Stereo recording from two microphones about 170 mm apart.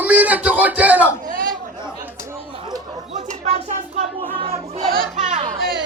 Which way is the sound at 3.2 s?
45° right (ahead or behind).